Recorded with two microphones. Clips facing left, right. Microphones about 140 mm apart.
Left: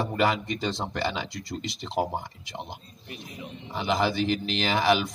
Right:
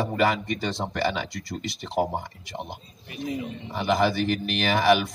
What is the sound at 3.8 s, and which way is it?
Speech, 55° right (ahead or behind).